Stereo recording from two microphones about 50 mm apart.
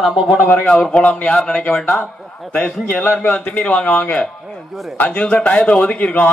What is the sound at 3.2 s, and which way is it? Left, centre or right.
A man's voice, left.